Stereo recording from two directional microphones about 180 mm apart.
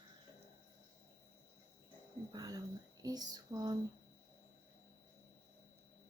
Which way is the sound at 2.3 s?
20° right (ahead or behind).